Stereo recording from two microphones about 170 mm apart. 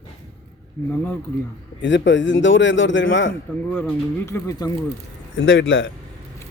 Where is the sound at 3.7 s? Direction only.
10° left (ahead or behind).